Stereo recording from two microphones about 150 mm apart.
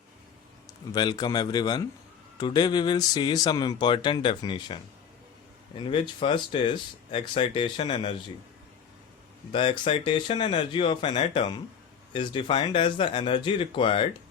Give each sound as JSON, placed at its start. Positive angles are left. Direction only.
{"t": 0.9, "sound": "speech", "side_deg": 25}
{"t": 9.5, "sound": "speech", "side_deg": 35}